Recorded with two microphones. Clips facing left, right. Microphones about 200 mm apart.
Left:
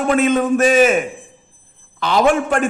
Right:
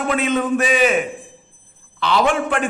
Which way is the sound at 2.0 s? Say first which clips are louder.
Left 3 dB; 45° left (ahead or behind).